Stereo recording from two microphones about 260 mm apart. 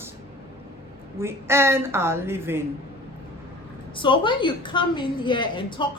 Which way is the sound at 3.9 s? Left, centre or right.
Centre.